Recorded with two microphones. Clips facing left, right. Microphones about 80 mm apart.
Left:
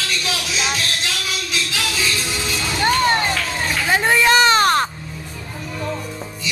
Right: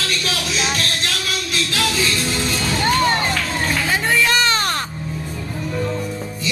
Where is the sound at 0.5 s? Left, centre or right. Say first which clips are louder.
Even; centre.